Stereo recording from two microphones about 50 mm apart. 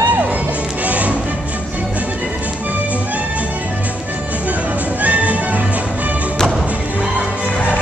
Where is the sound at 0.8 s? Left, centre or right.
Right.